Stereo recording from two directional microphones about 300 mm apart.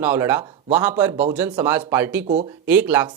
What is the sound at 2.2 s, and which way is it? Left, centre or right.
Speech, right.